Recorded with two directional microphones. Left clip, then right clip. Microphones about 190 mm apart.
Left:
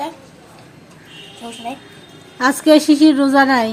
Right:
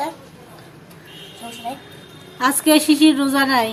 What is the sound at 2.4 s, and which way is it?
A woman's voice, 25° left (ahead or behind).